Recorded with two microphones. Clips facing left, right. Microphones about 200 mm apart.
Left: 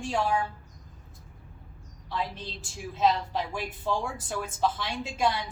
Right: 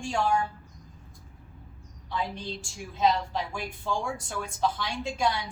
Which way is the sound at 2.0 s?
Centre (ahead or behind).